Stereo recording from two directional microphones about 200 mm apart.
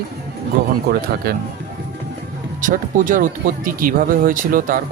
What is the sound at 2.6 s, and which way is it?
Speech, 40° right (ahead or behind).